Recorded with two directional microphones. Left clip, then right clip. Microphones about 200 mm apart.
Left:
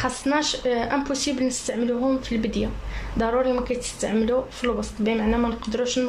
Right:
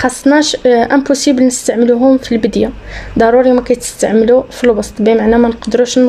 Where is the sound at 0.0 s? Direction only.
45° right (ahead or behind).